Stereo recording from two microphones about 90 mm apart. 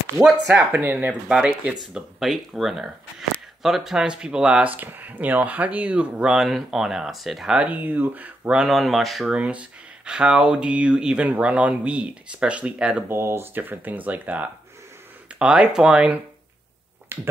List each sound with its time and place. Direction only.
0.7 s speech: 20° right (ahead or behind)
1.8 s speech: centre (ahead or behind)
7.5 s speech: 15° right (ahead or behind)
8.5 s speech: centre (ahead or behind)
13.1 s speech: 25° right (ahead or behind); by 16.2 s 10° right (ahead or behind)
17.1 s speech: 25° right (ahead or behind)